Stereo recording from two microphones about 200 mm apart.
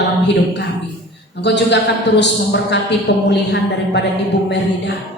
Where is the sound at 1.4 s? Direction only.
60° left (ahead or behind).